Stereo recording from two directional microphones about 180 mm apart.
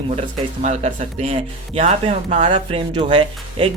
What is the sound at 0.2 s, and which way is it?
Speech, 40° right (ahead or behind).